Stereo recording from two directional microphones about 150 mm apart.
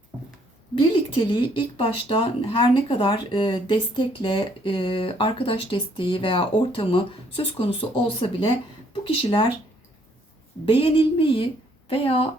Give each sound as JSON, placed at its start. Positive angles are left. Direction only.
{"t": 0.8, "sound": "speech", "side_deg": 35}
{"t": 10.7, "sound": "speech", "side_deg": 40}